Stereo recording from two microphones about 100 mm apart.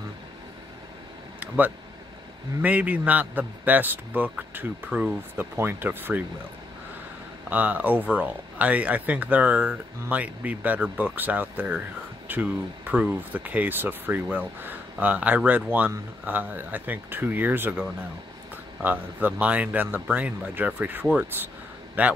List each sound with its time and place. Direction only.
2.6 s a man's voice: 15° right (ahead or behind)
7.4 s a man's voice: 15° right (ahead or behind)